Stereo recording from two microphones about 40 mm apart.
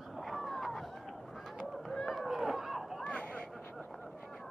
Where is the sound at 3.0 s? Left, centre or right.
Left.